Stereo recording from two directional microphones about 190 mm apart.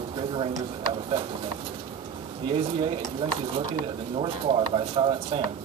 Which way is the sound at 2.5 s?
30° right (ahead or behind).